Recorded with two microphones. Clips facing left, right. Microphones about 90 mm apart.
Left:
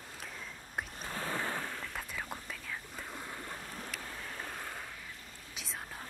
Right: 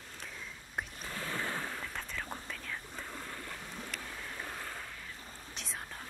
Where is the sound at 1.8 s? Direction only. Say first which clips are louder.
Even; 5° left (ahead or behind).